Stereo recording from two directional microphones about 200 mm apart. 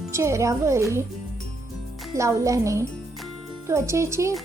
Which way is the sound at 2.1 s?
15° right (ahead or behind).